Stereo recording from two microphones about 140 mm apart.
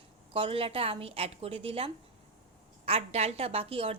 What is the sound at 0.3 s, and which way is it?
A woman's voice, 40° right (ahead or behind).